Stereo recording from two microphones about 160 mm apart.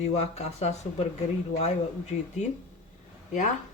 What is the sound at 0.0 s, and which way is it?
Speech, 40° left (ahead or behind).